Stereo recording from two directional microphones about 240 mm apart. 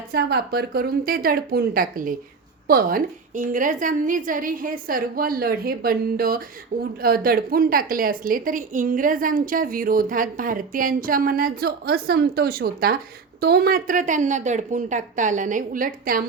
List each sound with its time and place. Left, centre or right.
0.1 s a woman's voice: right